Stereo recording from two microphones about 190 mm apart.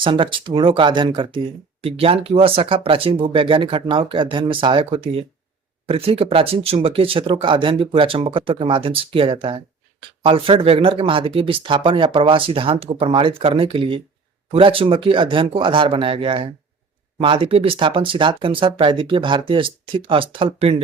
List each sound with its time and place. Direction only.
0.0 s speech: 25° right (ahead or behind)